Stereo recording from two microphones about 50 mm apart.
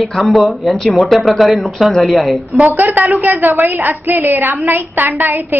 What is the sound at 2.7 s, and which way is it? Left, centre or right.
A woman's voice, right.